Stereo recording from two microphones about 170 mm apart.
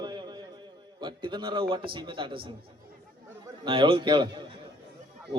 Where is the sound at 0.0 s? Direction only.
25° right (ahead or behind).